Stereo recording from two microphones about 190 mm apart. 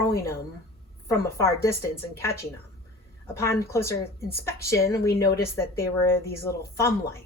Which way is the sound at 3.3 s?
15° left (ahead or behind).